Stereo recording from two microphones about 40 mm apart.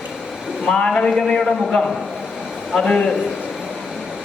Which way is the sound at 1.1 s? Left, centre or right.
Centre.